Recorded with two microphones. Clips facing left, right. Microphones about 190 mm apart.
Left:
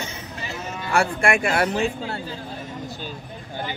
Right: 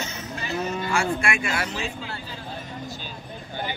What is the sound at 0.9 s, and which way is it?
Speech, 60° left (ahead or behind).